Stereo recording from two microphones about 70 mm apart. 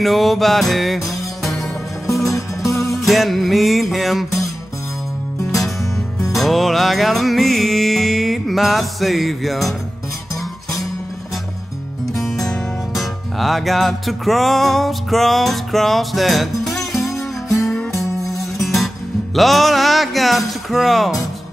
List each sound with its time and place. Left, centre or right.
0.0 s music: centre
2.3 s music: left
3.1 s speech: centre
6.3 s music: centre
12.1 s music: centre
17.1 s music: left
17.6 s music: centre
19.3 s speech: centre